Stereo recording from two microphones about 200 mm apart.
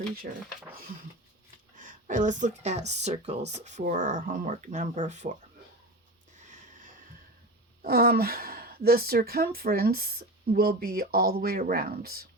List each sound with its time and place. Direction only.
1.7 s speech: 40° right (ahead or behind)
6.4 s snort: 40° right (ahead or behind)
7.8 s a woman's voice: 50° right (ahead or behind)